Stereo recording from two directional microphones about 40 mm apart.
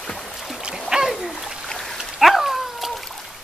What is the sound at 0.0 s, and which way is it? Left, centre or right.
Dog, centre.